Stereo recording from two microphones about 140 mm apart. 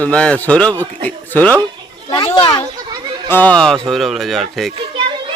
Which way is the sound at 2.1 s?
30° left (ahead or behind).